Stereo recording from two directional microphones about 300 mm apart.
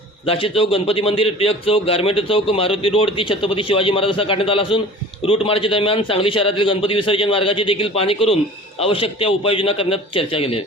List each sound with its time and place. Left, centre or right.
0.3 s a man's voice: centre